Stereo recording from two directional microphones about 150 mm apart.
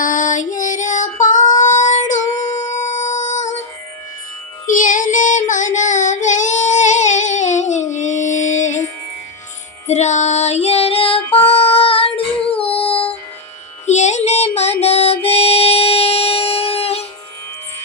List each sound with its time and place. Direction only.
0.0 s female singing: 60° left (ahead or behind)
1.5 s a sound: 55° left (ahead or behind)
4.7 s child singing: 60° left (ahead or behind)
9.8 s child singing: 50° left (ahead or behind)
11.4 s a sound: 40° left (ahead or behind)
13.8 s music: 50° left (ahead or behind)